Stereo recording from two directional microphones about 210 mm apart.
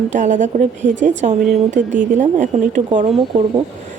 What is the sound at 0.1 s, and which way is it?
A woman's voice, 35° right (ahead or behind).